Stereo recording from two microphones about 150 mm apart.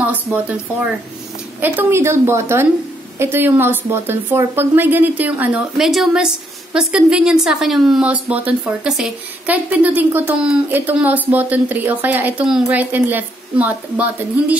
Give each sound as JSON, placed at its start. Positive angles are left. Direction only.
{"t": 0.0, "sound": "a woman's voice", "side_deg": -10}
{"t": 1.6, "sound": "a woman's voice", "side_deg": -15}